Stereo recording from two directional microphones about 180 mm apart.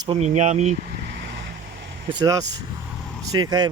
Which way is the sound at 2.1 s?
20° right (ahead or behind).